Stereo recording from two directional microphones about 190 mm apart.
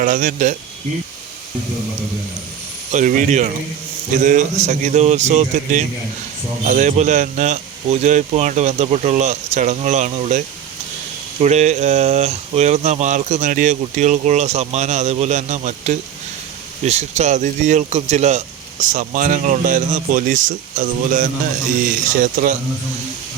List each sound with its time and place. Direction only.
0.0 s speech: 45° right (ahead or behind)
2.9 s speech: 45° right (ahead or behind)